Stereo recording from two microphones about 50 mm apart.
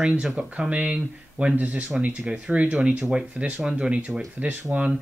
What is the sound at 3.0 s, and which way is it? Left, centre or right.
Speech, centre.